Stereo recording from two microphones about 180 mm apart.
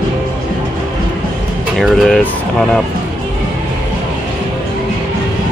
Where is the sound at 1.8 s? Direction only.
Centre (ahead or behind).